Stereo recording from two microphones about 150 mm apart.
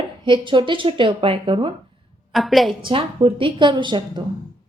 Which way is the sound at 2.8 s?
35° right (ahead or behind).